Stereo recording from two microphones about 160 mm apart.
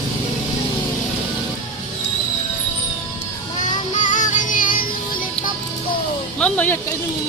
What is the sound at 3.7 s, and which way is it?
Music, 50° left (ahead or behind).